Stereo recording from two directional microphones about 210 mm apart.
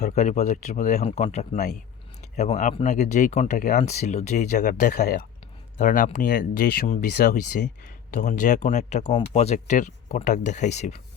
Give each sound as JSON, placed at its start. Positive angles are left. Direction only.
{"t": 0.0, "sound": "speech", "side_deg": 35}